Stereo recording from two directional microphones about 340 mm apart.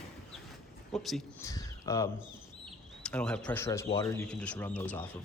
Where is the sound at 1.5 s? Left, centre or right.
Centre.